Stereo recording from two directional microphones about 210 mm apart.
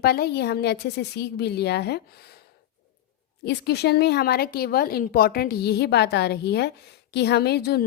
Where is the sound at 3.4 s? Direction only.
50° left (ahead or behind).